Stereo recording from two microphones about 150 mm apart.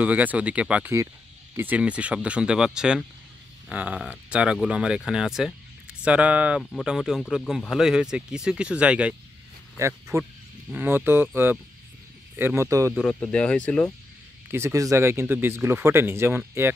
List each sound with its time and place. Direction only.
0.0 s speech: 10° right (ahead or behind)
9.8 s a man's voice: 20° right (ahead or behind)
13.3 s speech: 5° left (ahead or behind)
14.5 s speech: 20° right (ahead or behind)